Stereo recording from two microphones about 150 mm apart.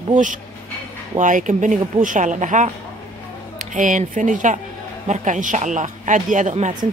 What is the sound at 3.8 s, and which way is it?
Speech, 60° right (ahead or behind).